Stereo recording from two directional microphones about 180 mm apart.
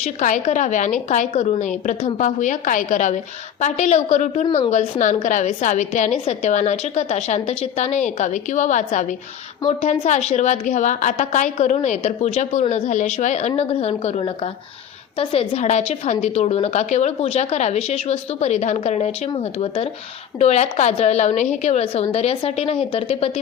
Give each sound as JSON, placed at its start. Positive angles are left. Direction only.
{"t": 0.0, "sound": "a woman's voice", "side_deg": 40}